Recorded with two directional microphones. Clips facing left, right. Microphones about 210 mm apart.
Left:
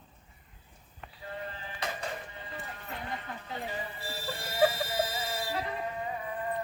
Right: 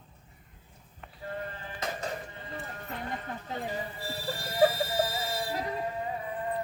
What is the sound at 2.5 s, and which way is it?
Clip-clop, 40° right (ahead or behind).